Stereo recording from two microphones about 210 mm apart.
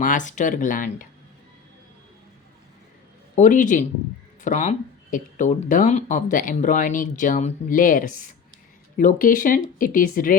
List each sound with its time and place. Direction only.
0.0 s speech: 40° left (ahead or behind)
3.3 s speech: 35° left (ahead or behind)